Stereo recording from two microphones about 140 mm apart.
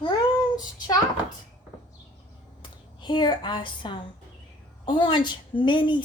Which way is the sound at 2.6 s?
35° left (ahead or behind).